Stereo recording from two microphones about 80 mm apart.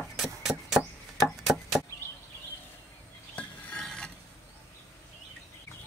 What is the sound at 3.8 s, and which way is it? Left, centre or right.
Filing, centre.